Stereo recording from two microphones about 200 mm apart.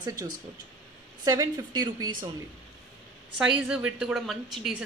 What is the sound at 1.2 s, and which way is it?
Speech, 20° right (ahead or behind).